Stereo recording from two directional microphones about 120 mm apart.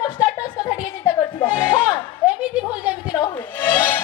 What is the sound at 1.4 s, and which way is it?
Music, 50° left (ahead or behind).